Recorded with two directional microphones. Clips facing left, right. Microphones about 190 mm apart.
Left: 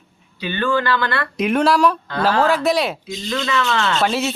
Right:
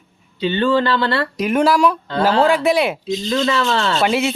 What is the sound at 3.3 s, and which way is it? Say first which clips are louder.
Speech: right 2 dB; 35° right (ahead or behind).